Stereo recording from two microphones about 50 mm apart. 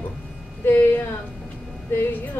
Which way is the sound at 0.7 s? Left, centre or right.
Left.